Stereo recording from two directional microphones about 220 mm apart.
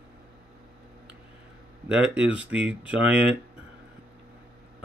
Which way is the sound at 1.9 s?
5° right (ahead or behind).